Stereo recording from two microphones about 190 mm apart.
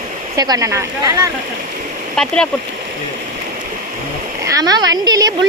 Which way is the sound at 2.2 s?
5° left (ahead or behind).